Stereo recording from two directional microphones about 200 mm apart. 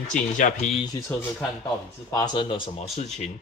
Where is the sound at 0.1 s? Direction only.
40° left (ahead or behind).